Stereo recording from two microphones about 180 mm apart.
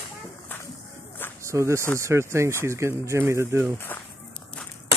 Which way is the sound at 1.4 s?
15° right (ahead or behind).